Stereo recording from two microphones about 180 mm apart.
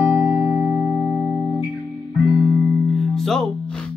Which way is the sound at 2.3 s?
20° left (ahead or behind).